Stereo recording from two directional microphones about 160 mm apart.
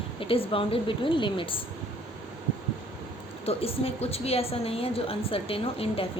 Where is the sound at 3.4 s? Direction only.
40° left (ahead or behind).